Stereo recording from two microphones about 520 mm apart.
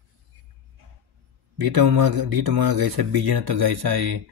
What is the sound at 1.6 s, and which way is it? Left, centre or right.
Speech, right.